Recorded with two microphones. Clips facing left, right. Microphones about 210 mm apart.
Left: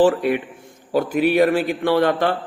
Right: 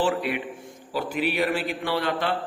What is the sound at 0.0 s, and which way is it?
A man's voice, 45° left (ahead or behind).